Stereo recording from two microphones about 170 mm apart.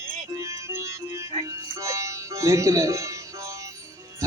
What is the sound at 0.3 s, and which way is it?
Music, 20° right (ahead or behind).